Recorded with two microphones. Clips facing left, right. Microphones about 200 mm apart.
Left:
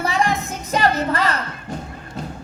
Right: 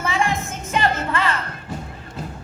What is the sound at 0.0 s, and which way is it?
Music, 35° left (ahead or behind).